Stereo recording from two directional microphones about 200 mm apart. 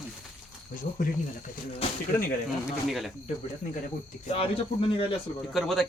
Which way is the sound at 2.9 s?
Centre (ahead or behind).